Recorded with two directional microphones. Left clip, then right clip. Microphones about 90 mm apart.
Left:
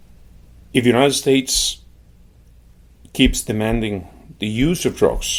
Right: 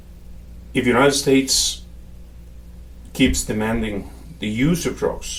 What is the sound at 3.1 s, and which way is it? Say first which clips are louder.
Speech: left 2 dB; 45° left (ahead or behind).